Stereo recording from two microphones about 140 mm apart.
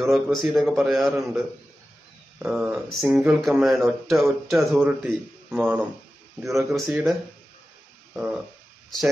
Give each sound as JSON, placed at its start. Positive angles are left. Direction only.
{"t": 0.0, "sound": "speech", "side_deg": 0}
{"t": 2.4, "sound": "speech", "side_deg": 0}
{"t": 8.1, "sound": "stomach rumble", "side_deg": -5}